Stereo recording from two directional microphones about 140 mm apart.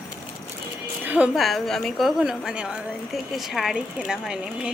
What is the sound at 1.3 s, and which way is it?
A woman's voice, centre (ahead or behind).